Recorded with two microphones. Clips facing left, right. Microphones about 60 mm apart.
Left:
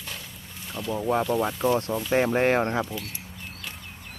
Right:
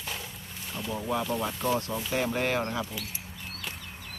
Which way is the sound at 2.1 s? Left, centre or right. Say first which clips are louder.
Left 7 dB; left.